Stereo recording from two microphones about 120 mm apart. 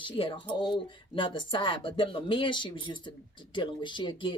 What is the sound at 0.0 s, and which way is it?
A man's voice, 45° left (ahead or behind).